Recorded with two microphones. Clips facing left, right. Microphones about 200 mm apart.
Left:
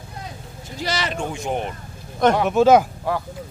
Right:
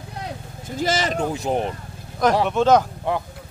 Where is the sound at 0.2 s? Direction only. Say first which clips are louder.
Right 4 dB; 50° right (ahead or behind).